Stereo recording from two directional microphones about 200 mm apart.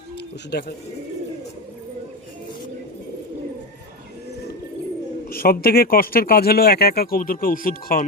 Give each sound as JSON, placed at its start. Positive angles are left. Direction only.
{"t": 0.5, "sound": "speech", "side_deg": 55}
{"t": 5.3, "sound": "speech", "side_deg": 50}